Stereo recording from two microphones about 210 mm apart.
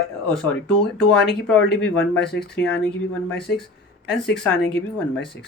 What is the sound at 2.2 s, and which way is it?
Speech, 50° left (ahead or behind).